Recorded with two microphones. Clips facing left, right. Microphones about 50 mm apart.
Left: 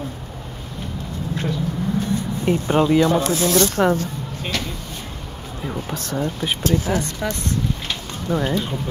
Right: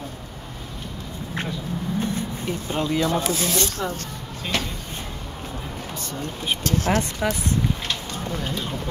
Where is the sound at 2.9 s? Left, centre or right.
Centre.